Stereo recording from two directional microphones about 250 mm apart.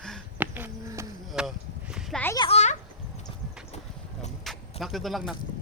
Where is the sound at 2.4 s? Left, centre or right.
Left.